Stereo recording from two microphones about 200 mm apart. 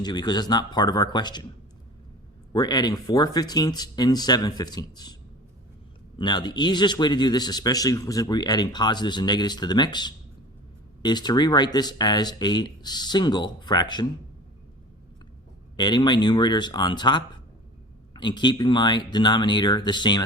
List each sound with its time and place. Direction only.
0.0 s speech: 20° left (ahead or behind)
2.5 s speech: 20° left (ahead or behind)
6.1 s speech: 20° left (ahead or behind)
15.8 s speech: 20° left (ahead or behind)